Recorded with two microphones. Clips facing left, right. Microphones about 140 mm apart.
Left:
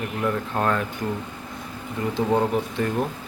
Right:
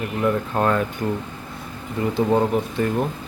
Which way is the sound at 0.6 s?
5° right (ahead or behind).